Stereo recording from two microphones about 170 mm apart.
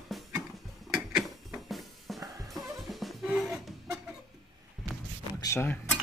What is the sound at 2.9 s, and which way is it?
Music, centre (ahead or behind).